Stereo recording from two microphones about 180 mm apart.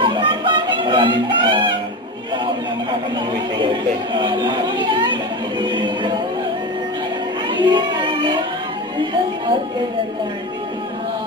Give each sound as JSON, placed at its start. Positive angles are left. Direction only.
{"t": 0.0, "sound": "music", "side_deg": -25}
{"t": 3.5, "sound": "music", "side_deg": -25}
{"t": 7.4, "sound": "music", "side_deg": -25}